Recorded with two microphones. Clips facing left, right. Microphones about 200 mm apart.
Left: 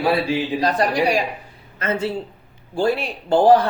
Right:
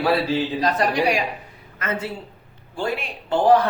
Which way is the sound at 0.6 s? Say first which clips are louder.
Left 2 dB; 35° left (ahead or behind).